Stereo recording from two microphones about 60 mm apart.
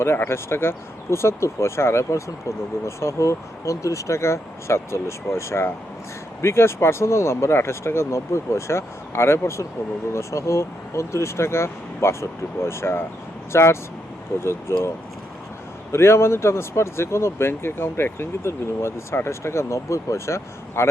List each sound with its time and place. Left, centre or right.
0.3 s speech: left
15.9 s speech: left